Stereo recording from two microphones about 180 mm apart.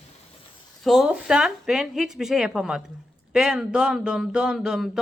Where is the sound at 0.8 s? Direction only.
5° right (ahead or behind).